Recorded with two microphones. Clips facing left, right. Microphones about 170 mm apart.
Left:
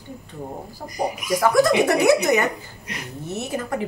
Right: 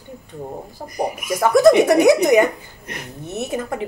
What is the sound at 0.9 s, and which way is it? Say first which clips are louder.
Speech: right 2 dB; 55° right (ahead or behind).